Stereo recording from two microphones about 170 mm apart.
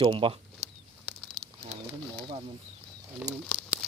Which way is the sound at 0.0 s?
30° right (ahead or behind).